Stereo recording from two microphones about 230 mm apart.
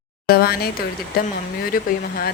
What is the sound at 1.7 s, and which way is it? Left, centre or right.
Speech, left.